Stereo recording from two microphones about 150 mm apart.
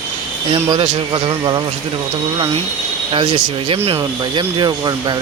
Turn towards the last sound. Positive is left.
turn(degrees=-30)  # may be behind; listen again after turning